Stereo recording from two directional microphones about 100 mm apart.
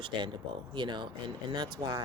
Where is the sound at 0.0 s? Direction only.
55° right (ahead or behind).